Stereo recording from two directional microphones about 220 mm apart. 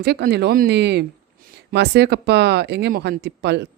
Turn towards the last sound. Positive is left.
turn(degrees=-50)  # may be behind; listen again after turning